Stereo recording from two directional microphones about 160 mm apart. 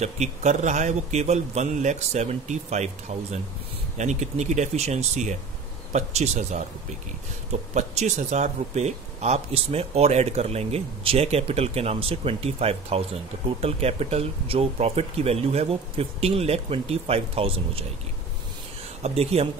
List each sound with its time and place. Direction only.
0.0 s a man's voice: 45° right (ahead or behind)
7.7 s speech: 45° right (ahead or behind)
19.0 s speech: 40° right (ahead or behind)